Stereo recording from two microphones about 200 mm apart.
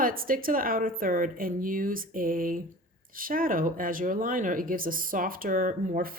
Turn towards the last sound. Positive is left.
turn(degrees=-45)  # may be behind; listen again after turning